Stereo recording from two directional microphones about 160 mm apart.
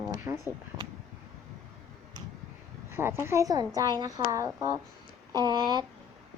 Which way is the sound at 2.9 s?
15° right (ahead or behind).